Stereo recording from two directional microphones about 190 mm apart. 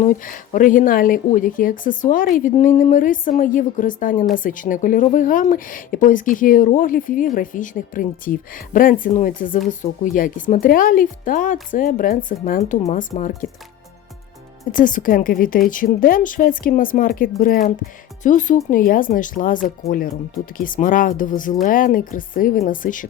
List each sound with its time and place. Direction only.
0.0 s speech: 45° left (ahead or behind)
14.7 s speech: 45° left (ahead or behind)